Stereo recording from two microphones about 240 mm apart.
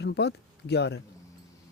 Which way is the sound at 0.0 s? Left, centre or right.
Left.